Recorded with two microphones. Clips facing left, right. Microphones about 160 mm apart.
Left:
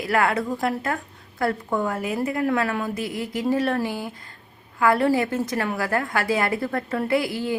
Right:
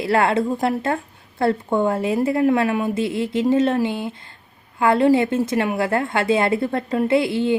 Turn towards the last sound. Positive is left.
turn(degrees=-25)  # may be behind; listen again after turning